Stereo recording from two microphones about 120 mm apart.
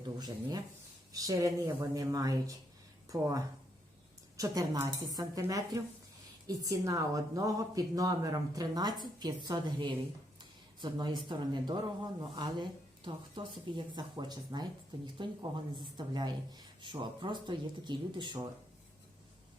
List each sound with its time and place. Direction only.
0.0 s a woman's voice: 35° right (ahead or behind)
13.1 s a woman's voice: 40° right (ahead or behind)